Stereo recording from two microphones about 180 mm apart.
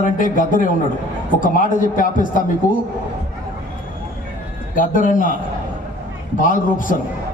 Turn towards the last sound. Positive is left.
turn(degrees=50)  # may be behind; listen again after turning